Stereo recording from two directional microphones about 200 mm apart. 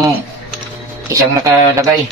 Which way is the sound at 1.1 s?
15° right (ahead or behind).